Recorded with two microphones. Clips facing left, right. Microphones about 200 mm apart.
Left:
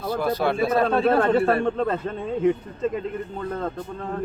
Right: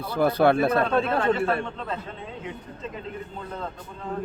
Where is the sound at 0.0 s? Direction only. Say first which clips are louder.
Right 3 dB; 60° right (ahead or behind).